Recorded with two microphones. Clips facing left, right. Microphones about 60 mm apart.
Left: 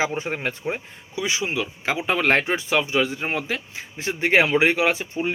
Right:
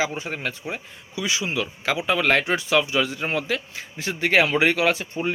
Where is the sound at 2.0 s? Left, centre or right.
Left.